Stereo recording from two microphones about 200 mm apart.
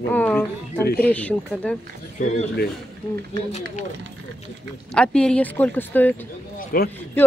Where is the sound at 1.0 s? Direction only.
5° left (ahead or behind).